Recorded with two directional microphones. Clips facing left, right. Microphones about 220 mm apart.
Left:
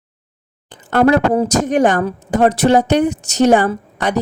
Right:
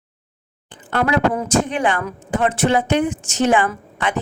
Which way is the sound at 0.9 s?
45° left (ahead or behind).